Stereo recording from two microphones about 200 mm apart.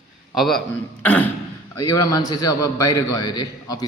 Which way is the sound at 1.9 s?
15° left (ahead or behind).